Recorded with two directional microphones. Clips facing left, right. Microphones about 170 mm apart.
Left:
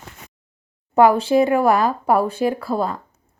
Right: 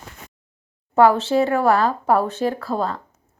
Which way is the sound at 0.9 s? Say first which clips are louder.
Left 1 dB; 15° left (ahead or behind).